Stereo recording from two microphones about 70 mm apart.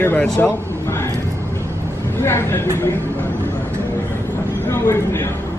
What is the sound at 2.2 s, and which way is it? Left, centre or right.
Speech, left.